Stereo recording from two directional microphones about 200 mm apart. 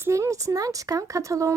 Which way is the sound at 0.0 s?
15° right (ahead or behind).